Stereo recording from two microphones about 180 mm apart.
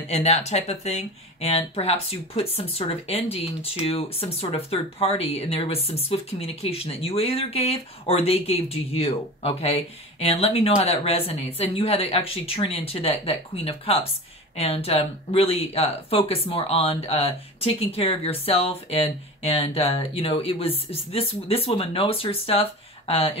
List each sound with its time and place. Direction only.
0.1 s speech: 35° left (ahead or behind)